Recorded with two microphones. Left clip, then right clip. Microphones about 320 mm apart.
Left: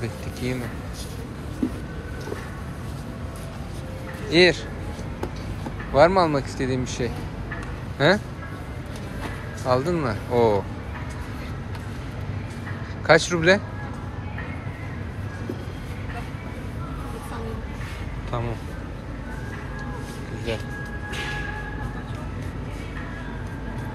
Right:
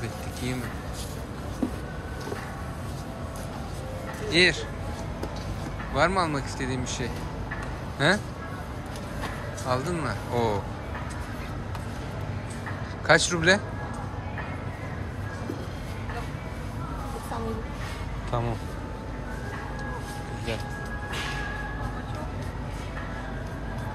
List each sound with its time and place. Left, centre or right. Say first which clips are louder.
0.0 s speech: left 3 dB; centre
4.3 s a man's voice: left 4 dB; centre
5.9 s speech: left 7 dB; centre
9.7 s speech: left 6 dB; centre
13.0 s speech: left 3 dB; centre